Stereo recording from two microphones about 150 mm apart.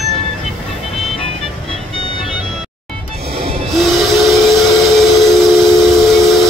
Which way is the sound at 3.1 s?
40° right (ahead or behind).